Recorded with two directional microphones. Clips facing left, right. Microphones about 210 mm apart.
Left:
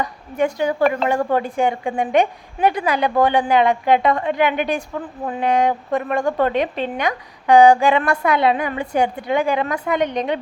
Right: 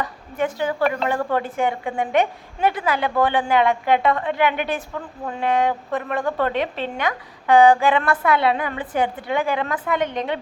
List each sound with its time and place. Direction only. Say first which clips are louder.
0.0 s a woman's voice: left 4 dB; 15° left (ahead or behind)